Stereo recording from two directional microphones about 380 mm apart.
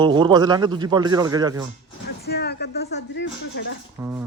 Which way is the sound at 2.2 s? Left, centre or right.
Left.